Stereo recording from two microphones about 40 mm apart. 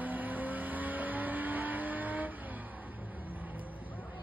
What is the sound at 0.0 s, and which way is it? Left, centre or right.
Vehicle, right.